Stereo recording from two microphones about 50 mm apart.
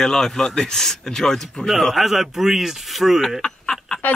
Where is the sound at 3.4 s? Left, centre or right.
Centre.